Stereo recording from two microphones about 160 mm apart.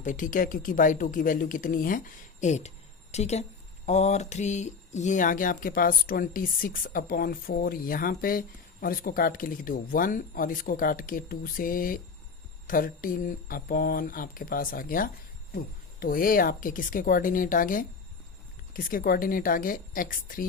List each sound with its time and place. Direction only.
0.0 s speech: 55° left (ahead or behind)
2.4 s speech: 45° left (ahead or behind)